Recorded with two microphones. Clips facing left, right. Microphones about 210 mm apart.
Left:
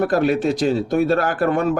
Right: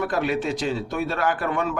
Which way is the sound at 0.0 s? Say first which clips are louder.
Left 6 dB; 40° left (ahead or behind).